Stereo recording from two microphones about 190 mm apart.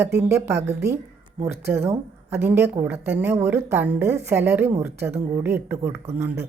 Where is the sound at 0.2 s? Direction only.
15° right (ahead or behind).